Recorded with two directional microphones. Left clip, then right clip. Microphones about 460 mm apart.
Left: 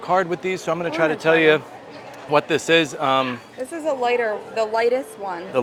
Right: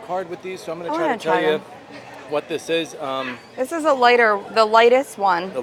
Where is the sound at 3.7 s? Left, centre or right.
Right.